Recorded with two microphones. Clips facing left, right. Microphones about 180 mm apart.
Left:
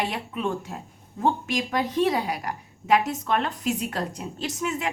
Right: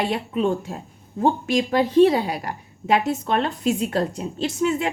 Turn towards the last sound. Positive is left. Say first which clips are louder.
# right 7 dB
turn(degrees=-30)  # may be behind; listen again after turning